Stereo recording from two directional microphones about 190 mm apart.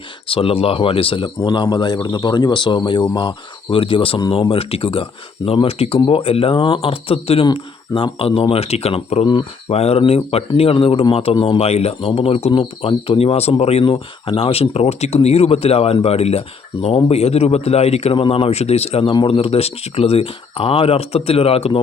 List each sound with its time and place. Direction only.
0.3 s speech: 30° left (ahead or behind)